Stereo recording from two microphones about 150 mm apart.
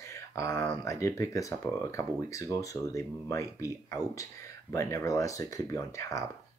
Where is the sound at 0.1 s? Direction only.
20° left (ahead or behind).